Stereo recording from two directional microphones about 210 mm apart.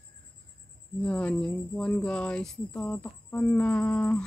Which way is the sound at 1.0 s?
5° left (ahead or behind).